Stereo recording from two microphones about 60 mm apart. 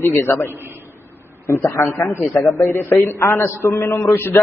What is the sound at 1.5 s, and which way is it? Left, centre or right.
Speech, left.